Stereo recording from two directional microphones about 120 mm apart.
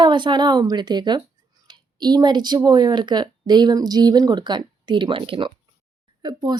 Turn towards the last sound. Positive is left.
turn(degrees=-35)  # may be behind; listen again after turning